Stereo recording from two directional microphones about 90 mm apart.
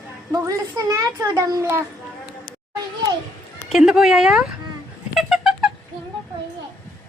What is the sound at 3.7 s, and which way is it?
Speech, 5° right (ahead or behind).